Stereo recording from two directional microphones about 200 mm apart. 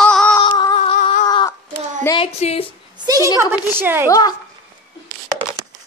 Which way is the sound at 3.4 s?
10° right (ahead or behind).